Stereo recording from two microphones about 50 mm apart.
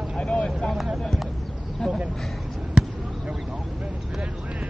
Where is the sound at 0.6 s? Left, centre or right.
Centre.